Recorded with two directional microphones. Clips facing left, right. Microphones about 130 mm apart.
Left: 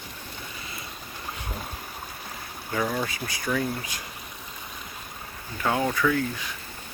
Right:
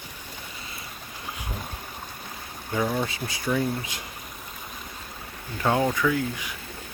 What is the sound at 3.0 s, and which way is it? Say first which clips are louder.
Speech: right 1 dB; 25° right (ahead or behind).